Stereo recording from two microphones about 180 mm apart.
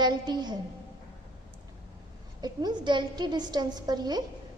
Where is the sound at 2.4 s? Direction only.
25° right (ahead or behind).